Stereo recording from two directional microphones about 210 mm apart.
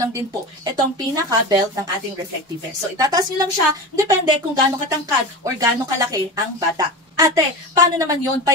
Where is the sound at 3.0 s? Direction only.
15° right (ahead or behind).